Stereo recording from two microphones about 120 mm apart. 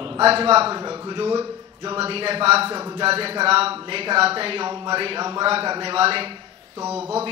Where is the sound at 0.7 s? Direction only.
35° right (ahead or behind).